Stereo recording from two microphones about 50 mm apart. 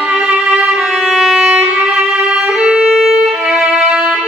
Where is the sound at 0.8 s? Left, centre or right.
Centre.